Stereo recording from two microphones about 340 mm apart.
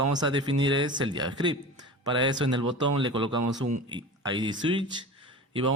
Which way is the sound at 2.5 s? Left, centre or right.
Right.